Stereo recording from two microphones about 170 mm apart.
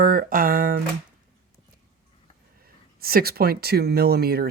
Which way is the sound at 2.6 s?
60° right (ahead or behind).